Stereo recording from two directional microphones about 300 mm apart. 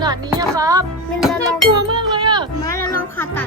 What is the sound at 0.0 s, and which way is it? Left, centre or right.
Speech, centre.